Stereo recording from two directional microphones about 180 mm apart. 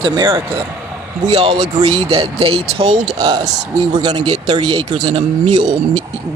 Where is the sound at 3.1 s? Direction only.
20° right (ahead or behind).